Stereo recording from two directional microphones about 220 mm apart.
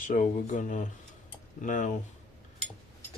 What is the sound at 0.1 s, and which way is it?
Speech, 35° left (ahead or behind).